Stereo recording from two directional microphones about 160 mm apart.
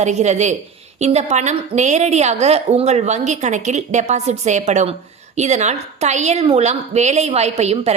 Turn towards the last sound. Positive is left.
turn(degrees=-40)  # may be behind; listen again after turning